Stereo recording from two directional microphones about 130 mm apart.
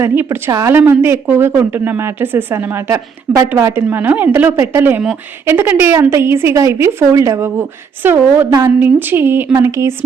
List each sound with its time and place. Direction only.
0.0 s a woman's voice: 20° right (ahead or behind)